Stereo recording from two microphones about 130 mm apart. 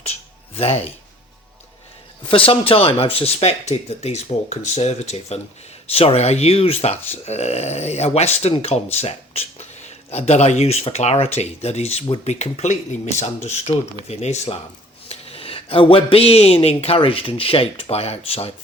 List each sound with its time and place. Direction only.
0.5 s speech: 50° left (ahead or behind)
2.3 s speech: 45° left (ahead or behind)